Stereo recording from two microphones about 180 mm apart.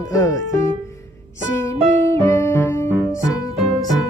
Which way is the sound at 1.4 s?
15° left (ahead or behind).